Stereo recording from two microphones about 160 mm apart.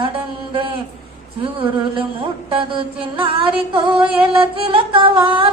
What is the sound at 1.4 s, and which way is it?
Music, 35° right (ahead or behind).